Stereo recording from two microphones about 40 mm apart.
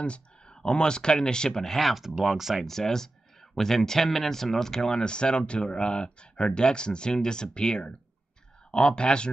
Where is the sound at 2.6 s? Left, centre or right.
Centre.